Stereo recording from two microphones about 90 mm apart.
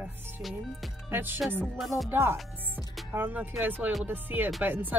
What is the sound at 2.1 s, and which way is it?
Speech, 30° right (ahead or behind).